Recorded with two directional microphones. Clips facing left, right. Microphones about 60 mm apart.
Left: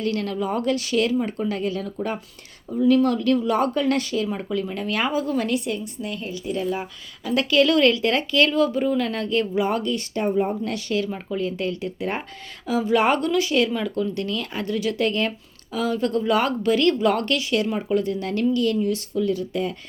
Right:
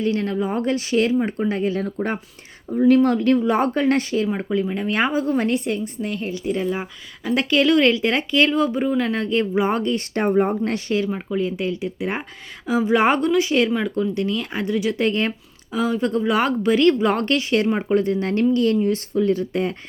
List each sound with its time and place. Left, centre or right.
0.0 s speech: right
1.8 s speech: right
10.6 s speech: right